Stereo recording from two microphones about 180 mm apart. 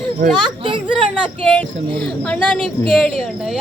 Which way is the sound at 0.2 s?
50° right (ahead or behind).